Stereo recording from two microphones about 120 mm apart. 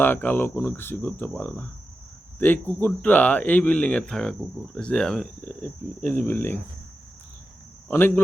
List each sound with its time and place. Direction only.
0.0 s speech: 15° left (ahead or behind)
7.9 s speech: 15° left (ahead or behind)